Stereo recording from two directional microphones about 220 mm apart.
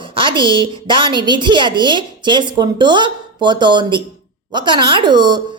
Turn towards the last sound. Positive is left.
turn(degrees=-20)  # may be behind; listen again after turning